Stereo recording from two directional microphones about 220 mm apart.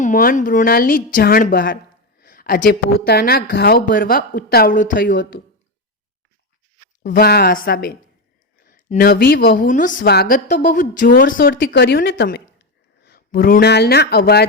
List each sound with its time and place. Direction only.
0.0 s a woman's voice: 40° left (ahead or behind)
7.0 s a woman's voice: 50° left (ahead or behind)